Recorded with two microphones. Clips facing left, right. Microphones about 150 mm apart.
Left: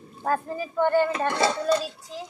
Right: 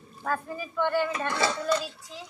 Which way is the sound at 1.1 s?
25° left (ahead or behind).